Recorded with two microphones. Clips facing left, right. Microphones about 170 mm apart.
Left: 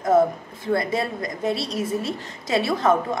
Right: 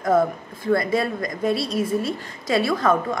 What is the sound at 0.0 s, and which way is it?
A woman's voice, 25° left (ahead or behind).